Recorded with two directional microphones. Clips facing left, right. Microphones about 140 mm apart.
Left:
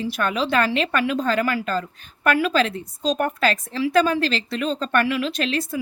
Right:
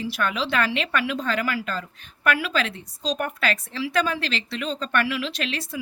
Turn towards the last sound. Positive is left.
turn(degrees=45)  # may be behind; listen again after turning